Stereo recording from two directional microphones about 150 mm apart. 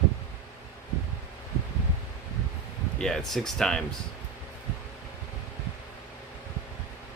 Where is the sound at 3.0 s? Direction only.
Centre (ahead or behind).